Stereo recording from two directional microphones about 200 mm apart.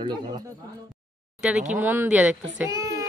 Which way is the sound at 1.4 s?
5° right (ahead or behind).